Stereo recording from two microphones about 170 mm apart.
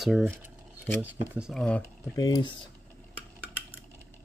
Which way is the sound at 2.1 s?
20° left (ahead or behind).